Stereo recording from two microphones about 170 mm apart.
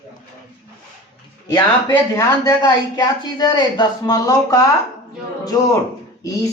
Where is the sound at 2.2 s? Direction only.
20° left (ahead or behind).